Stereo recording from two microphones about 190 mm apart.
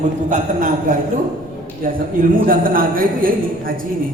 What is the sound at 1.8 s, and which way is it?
A man's voice, 50° right (ahead or behind).